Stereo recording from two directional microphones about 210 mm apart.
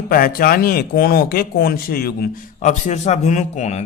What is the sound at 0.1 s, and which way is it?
Speech, 45° left (ahead or behind).